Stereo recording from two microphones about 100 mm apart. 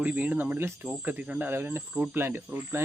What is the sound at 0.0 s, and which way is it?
Speech, 15° right (ahead or behind).